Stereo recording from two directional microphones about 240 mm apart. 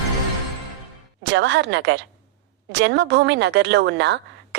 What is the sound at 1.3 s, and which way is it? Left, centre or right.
Speech, right.